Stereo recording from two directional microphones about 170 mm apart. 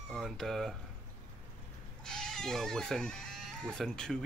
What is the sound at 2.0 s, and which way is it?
Speech, 5° left (ahead or behind).